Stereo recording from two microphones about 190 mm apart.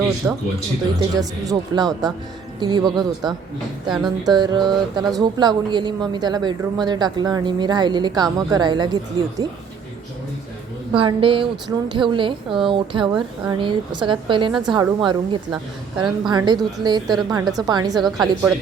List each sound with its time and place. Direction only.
0.2 s speech: 10° right (ahead or behind)
10.9 s speech: 25° right (ahead or behind)
18.0 s a woman's voice: centre (ahead or behind)